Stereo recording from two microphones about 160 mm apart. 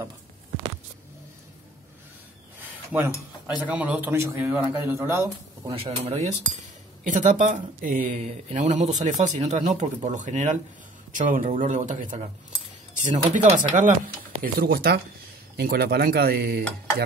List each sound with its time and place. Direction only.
2.6 s speech: 10° right (ahead or behind)
5.7 s speech: 35° right (ahead or behind)
7.1 s speech: 50° right (ahead or behind)
14.4 s speech: 65° right (ahead or behind)
15.5 s speech: 85° right